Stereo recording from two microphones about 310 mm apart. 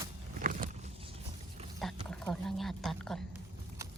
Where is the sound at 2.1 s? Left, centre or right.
Centre.